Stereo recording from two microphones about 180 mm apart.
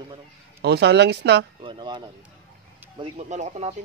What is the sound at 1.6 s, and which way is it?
Speech, 25° right (ahead or behind).